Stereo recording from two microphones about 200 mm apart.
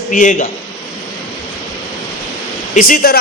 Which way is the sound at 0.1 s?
40° left (ahead or behind).